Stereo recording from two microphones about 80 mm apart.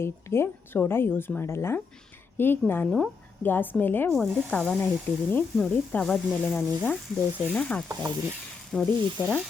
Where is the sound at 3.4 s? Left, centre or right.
Left.